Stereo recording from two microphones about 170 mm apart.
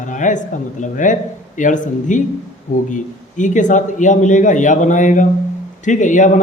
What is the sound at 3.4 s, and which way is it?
Speech, 45° left (ahead or behind).